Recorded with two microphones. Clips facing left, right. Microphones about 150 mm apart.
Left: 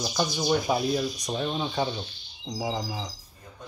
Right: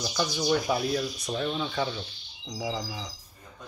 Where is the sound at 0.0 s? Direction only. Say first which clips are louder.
Left 1 dB; 25° left (ahead or behind).